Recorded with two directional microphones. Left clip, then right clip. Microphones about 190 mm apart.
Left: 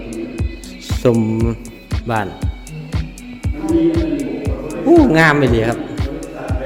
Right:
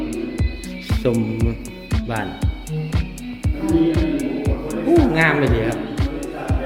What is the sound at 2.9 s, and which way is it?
Music, centre (ahead or behind).